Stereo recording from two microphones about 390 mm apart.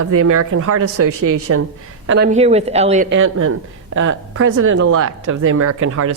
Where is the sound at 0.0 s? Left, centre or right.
Right.